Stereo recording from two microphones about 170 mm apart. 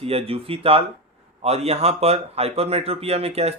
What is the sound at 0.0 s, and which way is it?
Speech, 35° right (ahead or behind).